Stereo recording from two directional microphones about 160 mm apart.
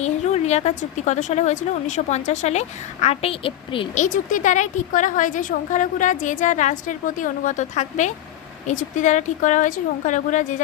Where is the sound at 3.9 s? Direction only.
50° left (ahead or behind).